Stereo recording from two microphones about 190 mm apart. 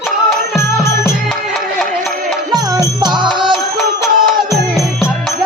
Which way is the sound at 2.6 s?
20° right (ahead or behind).